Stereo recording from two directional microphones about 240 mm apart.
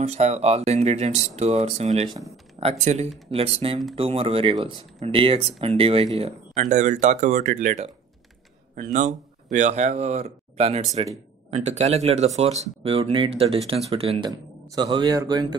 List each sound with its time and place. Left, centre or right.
0.0 s speech: right